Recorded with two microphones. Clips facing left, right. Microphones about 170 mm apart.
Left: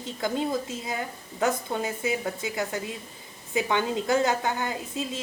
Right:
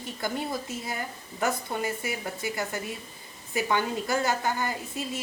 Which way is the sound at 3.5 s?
20° left (ahead or behind).